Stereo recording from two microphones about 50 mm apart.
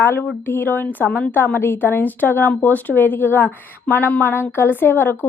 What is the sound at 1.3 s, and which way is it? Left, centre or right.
Speech, left.